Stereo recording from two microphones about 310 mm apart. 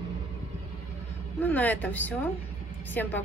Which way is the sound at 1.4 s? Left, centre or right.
Centre.